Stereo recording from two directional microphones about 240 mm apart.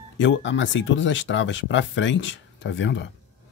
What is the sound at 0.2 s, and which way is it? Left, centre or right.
Speech, left.